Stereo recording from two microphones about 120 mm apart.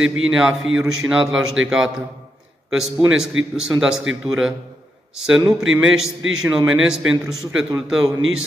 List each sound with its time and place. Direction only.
0.0 s a man's voice: 5° right (ahead or behind)